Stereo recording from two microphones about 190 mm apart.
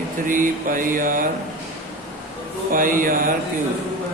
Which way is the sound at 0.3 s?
45° right (ahead or behind).